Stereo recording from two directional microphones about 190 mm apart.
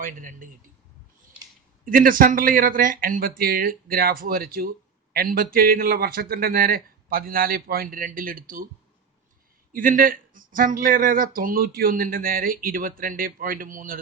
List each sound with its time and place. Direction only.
0.0 s speech: 45° right (ahead or behind)
1.8 s speech: 45° right (ahead or behind)
9.7 s speech: 45° right (ahead or behind)